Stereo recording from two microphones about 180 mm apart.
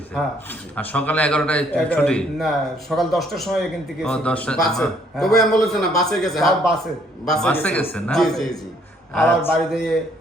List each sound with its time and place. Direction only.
0.8 s a man's voice: 10° left (ahead or behind)